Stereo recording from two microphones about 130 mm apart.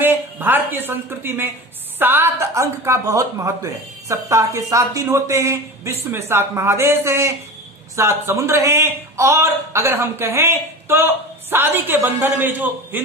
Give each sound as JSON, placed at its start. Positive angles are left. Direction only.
{"t": 0.0, "sound": "a man's voice", "side_deg": -15}